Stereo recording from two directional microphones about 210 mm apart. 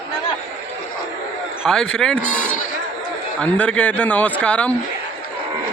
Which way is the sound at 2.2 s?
35° left (ahead or behind).